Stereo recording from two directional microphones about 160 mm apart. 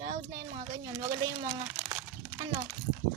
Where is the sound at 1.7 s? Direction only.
5° right (ahead or behind).